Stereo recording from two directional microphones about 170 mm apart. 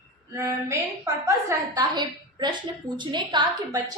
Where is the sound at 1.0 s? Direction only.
20° right (ahead or behind).